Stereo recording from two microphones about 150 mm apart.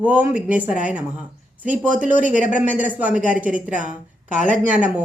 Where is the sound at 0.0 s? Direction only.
10° right (ahead or behind).